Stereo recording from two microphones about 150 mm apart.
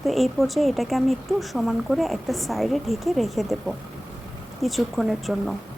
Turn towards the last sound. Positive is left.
turn(degrees=0)  # may be behind; listen again after turning